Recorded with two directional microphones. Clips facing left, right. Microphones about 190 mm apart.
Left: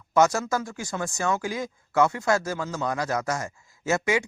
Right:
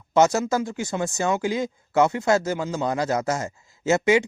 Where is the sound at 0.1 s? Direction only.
25° right (ahead or behind).